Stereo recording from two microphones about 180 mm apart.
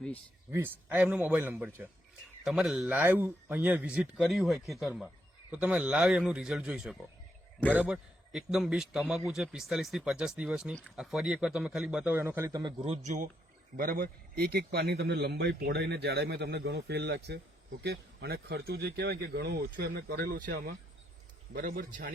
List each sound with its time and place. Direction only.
0.5 s a man's voice: 10° right (ahead or behind)
12.8 s speech: 40° right (ahead or behind)
13.7 s a man's voice: 55° right (ahead or behind)